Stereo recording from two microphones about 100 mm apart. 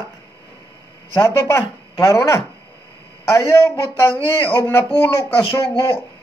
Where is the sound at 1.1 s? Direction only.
30° left (ahead or behind).